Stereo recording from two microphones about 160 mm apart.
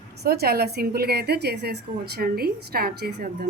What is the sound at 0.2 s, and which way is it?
A woman's voice, 80° right.